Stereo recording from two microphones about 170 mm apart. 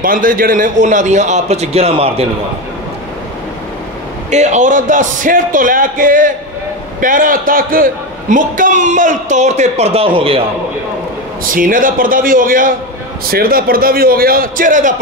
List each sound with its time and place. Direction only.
0.0 s a man's voice: 55° right (ahead or behind); by 2.2 s 35° right (ahead or behind)
4.3 s a man's voice: 45° right (ahead or behind)
11.4 s a man's voice: 55° right (ahead or behind)